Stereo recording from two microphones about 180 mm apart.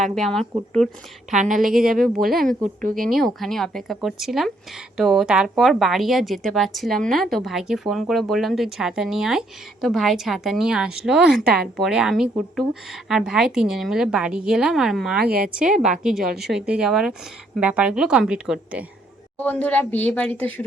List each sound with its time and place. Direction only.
0.0 s a woman's voice: centre (ahead or behind)
1.4 s a woman's voice: 45° right (ahead or behind)
2.3 s a woman's voice: centre (ahead or behind)
2.8 s a woman's voice: 50° right (ahead or behind)
3.1 s a woman's voice: centre (ahead or behind)
15.2 s speech: 55° right (ahead or behind)
15.5 s a woman's voice: 5° right (ahead or behind)
16.2 s speech: 60° right (ahead or behind)
16.5 s a woman's voice: 5° right (ahead or behind)
19.4 s speech: 10° left (ahead or behind)